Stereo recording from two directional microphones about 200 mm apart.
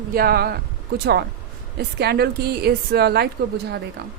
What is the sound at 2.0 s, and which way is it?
A woman's voice, 55° right (ahead or behind).